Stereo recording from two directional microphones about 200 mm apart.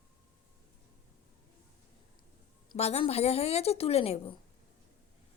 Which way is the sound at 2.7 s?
30° left (ahead or behind).